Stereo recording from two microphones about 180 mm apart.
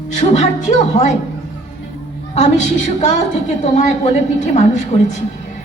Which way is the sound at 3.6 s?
40° left (ahead or behind).